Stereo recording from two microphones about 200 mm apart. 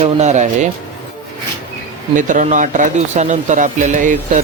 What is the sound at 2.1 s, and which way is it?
Speech, 40° right (ahead or behind).